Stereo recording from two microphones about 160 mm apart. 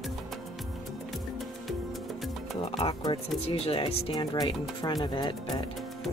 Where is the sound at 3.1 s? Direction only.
30° left (ahead or behind).